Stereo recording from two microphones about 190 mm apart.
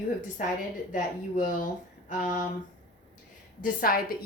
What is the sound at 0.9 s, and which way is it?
A woman's voice, 45° left (ahead or behind).